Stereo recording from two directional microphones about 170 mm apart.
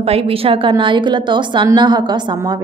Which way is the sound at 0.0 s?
35° right (ahead or behind).